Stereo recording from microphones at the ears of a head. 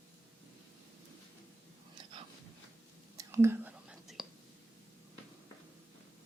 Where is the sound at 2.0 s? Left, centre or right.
Right.